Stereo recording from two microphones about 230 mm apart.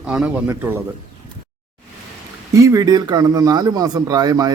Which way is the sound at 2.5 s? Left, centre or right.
Centre.